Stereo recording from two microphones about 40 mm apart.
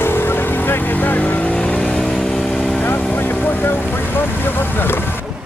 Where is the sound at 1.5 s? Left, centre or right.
Left.